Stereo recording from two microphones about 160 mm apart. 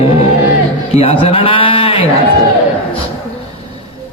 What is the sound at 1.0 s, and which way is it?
Speech, 35° left (ahead or behind).